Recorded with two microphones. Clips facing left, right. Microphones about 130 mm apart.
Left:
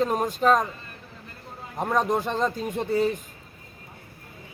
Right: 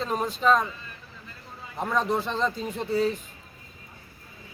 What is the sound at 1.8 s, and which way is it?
Speech, 50° left (ahead or behind).